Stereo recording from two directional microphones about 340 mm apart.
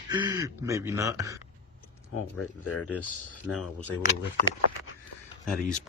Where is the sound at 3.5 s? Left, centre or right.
Centre.